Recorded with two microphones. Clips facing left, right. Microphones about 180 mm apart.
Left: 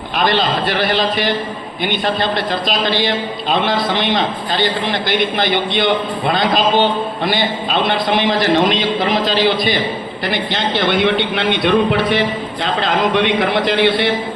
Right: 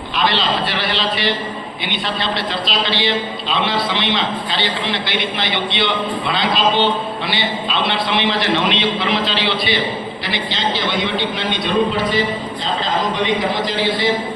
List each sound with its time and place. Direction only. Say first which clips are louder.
0.2 s a man's voice: left 3 dB; 50° left (ahead or behind); by 14.1 s 65° left (ahead or behind)